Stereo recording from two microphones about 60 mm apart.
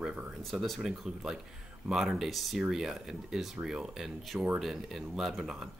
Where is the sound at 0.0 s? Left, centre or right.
Centre.